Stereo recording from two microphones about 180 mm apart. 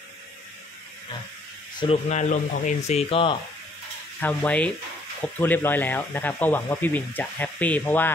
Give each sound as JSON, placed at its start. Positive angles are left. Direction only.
{"t": 1.8, "sound": "speech", "side_deg": 35}
{"t": 4.2, "sound": "speech", "side_deg": 10}